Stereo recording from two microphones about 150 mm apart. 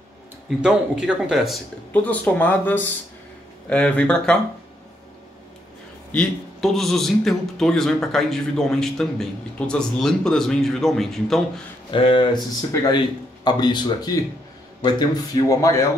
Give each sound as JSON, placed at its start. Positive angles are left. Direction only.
{"t": 0.6, "sound": "a man's voice", "side_deg": -5}
{"t": 2.0, "sound": "speech", "side_deg": 10}
{"t": 6.1, "sound": "a man's voice", "side_deg": 0}
{"t": 11.9, "sound": "speech", "side_deg": 35}